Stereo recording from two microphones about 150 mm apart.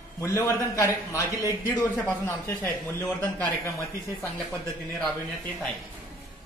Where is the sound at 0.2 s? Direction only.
20° left (ahead or behind).